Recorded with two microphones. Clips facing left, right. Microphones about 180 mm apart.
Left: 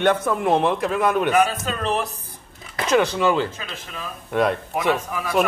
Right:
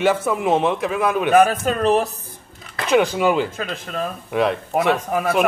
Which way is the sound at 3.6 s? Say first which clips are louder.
Right 9 dB; 50° right (ahead or behind).